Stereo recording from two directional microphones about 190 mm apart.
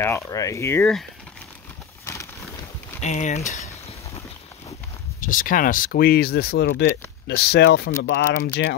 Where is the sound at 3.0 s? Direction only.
40° left (ahead or behind).